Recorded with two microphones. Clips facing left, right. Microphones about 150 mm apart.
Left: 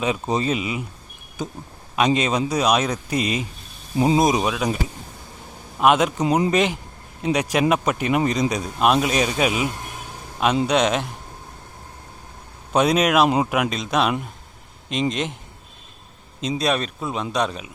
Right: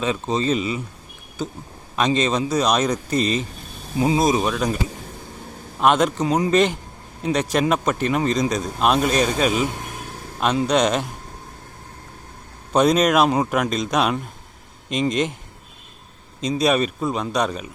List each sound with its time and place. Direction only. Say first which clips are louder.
0.0 s a man's voice: even; 15° left (ahead or behind)
3.9 s speech: left 1 dB; 30° left (ahead or behind)
4.2 s a man's voice: even; 15° left (ahead or behind)
4.4 s speech: right 1 dB; 5° left (ahead or behind)
5.8 s a man's voice: even; 5° left (ahead or behind)
10.7 s speech: right 1 dB; centre (ahead or behind)
12.7 s speech: right 1 dB; 5° left (ahead or behind)
16.4 s speech: right 3 dB; centre (ahead or behind)